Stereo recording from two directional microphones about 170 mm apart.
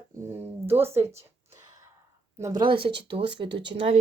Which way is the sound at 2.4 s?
25° right (ahead or behind).